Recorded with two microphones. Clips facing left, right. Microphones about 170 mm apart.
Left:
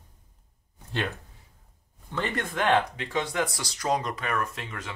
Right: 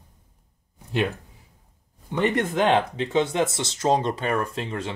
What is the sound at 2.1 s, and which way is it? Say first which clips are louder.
Speech: right 8 dB; 20° right (ahead or behind).